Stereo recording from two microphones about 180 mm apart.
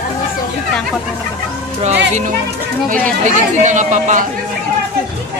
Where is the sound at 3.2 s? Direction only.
45° right (ahead or behind).